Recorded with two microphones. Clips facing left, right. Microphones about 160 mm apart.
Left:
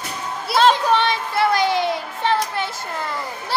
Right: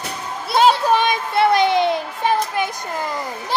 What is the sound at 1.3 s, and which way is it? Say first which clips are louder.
A child's voice: right 4 dB; 25° right (ahead or behind).